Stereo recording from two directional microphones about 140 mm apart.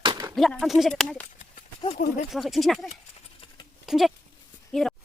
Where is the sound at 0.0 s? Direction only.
30° right (ahead or behind).